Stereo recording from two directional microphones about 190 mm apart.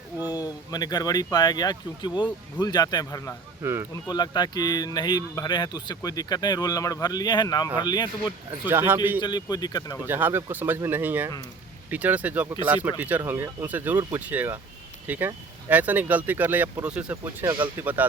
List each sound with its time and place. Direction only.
0.3 s speech: 20° left (ahead or behind)
3.6 s speech: 15° right (ahead or behind)
4.1 s speech: 20° left (ahead or behind)
8.6 s speech: 10° right (ahead or behind)
9.2 s speech: 20° left (ahead or behind)
10.1 s speech: 10° right (ahead or behind)